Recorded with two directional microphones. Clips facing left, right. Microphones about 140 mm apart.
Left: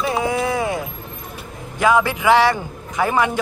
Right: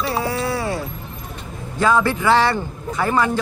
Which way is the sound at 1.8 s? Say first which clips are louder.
Left 1 dB; 15° left (ahead or behind).